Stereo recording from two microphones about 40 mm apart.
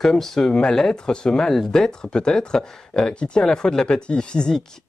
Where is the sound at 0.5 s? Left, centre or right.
Left.